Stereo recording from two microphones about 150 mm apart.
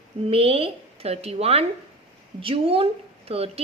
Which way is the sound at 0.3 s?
40° right (ahead or behind).